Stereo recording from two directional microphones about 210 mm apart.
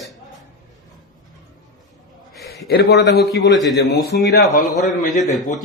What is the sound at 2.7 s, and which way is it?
Speech, 50° left (ahead or behind).